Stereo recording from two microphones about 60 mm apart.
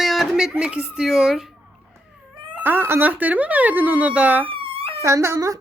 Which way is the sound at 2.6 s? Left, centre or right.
Right.